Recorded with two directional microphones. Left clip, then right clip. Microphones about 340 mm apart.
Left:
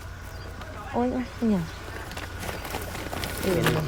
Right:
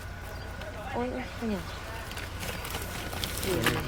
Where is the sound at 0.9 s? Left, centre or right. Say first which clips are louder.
Left 7 dB; right.